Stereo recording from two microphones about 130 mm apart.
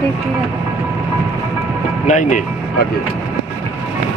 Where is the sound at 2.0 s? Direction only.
75° left (ahead or behind).